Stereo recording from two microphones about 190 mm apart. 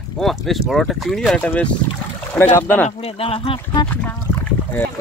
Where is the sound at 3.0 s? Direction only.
30° left (ahead or behind).